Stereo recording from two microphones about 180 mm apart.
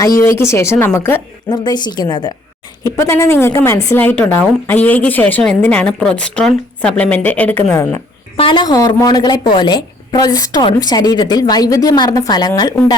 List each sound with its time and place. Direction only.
0.2 s a woman's voice: 15° left (ahead or behind)
1.5 s a woman's voice: 25° left (ahead or behind)
8.4 s a woman's voice: 25° left (ahead or behind)